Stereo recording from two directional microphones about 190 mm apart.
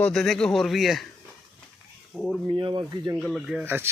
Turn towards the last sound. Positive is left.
turn(degrees=0)  # may be behind; listen again after turning